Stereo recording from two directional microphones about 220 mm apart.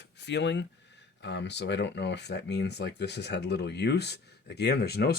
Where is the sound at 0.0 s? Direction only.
50° left (ahead or behind).